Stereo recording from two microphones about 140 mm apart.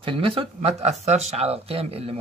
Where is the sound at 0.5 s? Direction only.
50° right (ahead or behind).